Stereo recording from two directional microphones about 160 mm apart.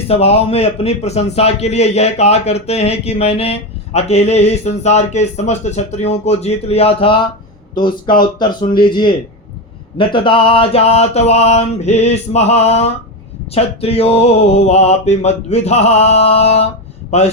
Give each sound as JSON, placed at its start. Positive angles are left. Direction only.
{"t": 0.1, "sound": "a man's voice", "side_deg": 40}